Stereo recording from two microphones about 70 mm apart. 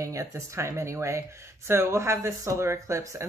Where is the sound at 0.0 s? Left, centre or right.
Right.